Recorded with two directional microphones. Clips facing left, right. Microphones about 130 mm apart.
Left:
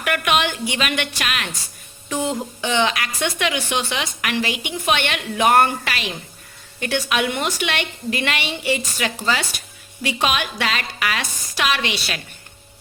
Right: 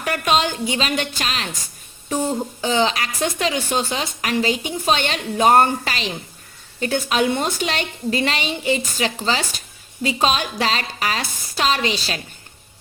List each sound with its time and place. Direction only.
0.0 s a woman's voice: 35° right (ahead or behind)